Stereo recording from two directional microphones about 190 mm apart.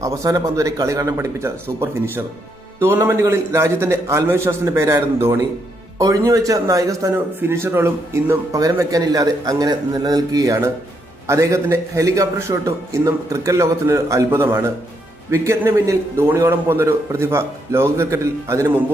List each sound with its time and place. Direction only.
0.0 s a man's voice: 15° right (ahead or behind)